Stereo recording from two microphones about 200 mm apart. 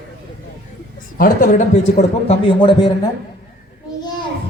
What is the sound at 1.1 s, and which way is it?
A man's voice, 45° left (ahead or behind).